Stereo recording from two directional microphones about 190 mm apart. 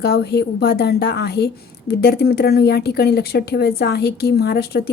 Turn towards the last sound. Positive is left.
turn(degrees=55)  # may be behind; listen again after turning